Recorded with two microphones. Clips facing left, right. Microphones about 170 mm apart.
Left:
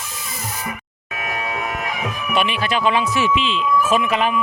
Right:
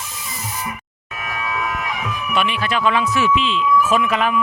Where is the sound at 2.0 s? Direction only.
25° left (ahead or behind).